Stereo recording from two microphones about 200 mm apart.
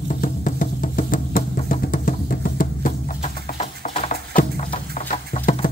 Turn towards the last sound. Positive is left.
turn(degrees=40)  # may be behind; listen again after turning